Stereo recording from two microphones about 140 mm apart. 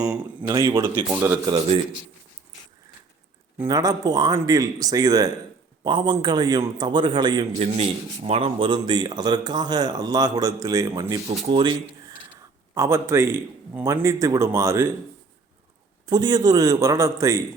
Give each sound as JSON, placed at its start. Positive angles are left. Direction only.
{"t": 0.4, "sound": "speech", "side_deg": -30}
{"t": 0.7, "sound": "speech", "side_deg": -15}
{"t": 1.5, "sound": "a man's voice", "side_deg": -40}
{"t": 3.7, "sound": "a man's voice", "side_deg": -25}
{"t": 8.3, "sound": "speech", "side_deg": -40}
{"t": 11.3, "sound": "a man's voice", "side_deg": -35}
{"t": 12.7, "sound": "speech", "side_deg": -20}
{"t": 16.0, "sound": "speech", "side_deg": -30}